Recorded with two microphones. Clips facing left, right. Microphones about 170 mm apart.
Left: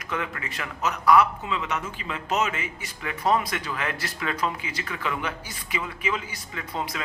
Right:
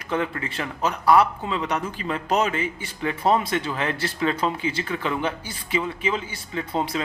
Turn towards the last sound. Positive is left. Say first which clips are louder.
# right 6 dB
turn(degrees=-30)  # may be behind; listen again after turning